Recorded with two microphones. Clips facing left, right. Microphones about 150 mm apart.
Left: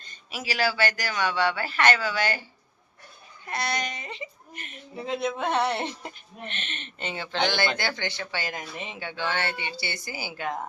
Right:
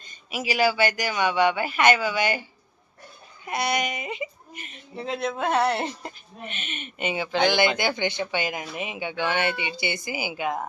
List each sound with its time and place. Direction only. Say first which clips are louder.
0.0 s speech: right 5 dB; 15° right (ahead or behind)
3.4 s speech: right 4 dB; 15° right (ahead or behind)